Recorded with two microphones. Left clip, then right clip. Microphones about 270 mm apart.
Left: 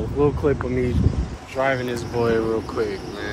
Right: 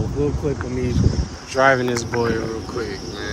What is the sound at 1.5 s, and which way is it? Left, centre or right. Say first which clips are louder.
Speech: right 6 dB; right.